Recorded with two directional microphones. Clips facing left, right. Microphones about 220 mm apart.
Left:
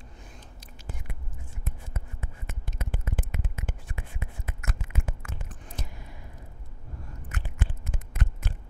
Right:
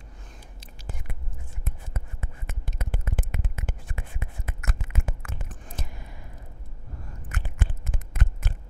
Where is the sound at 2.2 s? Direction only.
55° right (ahead or behind).